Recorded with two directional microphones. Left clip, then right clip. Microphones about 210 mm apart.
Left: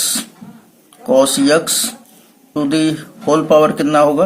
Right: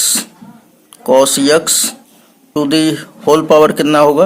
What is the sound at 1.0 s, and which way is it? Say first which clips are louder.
A man's voice: right 3 dB; 35° right (ahead or behind).